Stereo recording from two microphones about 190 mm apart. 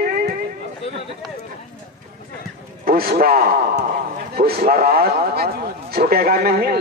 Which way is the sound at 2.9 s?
50° right (ahead or behind).